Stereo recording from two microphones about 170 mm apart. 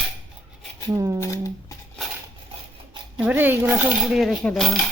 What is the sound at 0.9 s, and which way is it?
Speech, 20° right (ahead or behind).